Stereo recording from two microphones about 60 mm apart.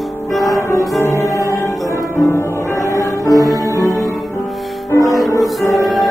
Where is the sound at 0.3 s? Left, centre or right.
Centre.